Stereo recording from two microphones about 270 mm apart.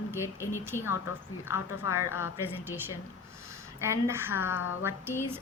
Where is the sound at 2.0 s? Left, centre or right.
Centre.